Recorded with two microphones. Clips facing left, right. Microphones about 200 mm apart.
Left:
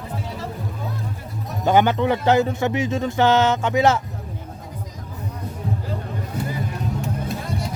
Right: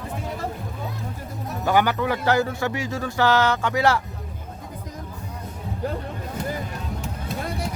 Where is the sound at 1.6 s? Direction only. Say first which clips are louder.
Left 4 dB; 25° left (ahead or behind).